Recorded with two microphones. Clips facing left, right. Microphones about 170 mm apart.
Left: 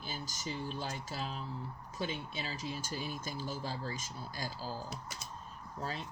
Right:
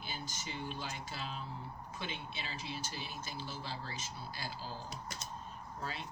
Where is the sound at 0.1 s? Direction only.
40° left (ahead or behind).